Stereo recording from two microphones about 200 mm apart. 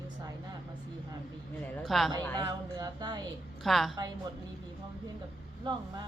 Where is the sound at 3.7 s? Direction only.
Centre (ahead or behind).